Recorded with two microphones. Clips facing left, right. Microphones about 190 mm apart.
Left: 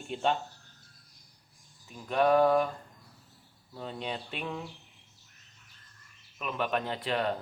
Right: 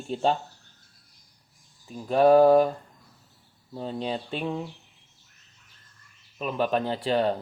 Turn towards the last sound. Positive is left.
turn(degrees=-30)  # may be behind; listen again after turning